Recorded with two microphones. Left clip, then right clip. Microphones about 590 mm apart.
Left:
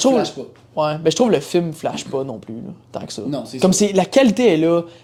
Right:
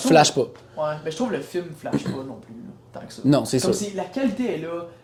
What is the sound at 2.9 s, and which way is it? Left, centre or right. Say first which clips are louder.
Speech: left 9 dB; left.